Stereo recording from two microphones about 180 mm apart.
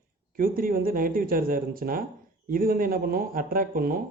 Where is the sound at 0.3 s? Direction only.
50° right (ahead or behind).